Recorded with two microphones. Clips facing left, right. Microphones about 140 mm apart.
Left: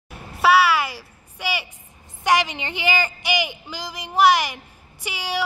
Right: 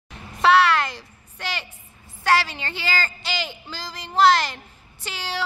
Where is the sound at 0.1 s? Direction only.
5° left (ahead or behind).